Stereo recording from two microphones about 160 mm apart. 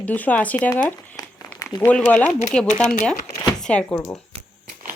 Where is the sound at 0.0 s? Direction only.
10° left (ahead or behind).